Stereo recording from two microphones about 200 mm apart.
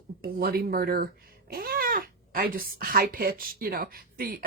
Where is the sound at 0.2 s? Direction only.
50° right (ahead or behind).